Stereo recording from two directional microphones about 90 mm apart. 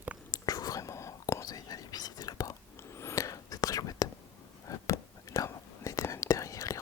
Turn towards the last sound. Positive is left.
turn(degrees=35)  # may be behind; listen again after turning